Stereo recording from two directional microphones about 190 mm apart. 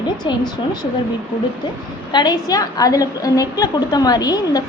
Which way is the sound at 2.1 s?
20° left (ahead or behind).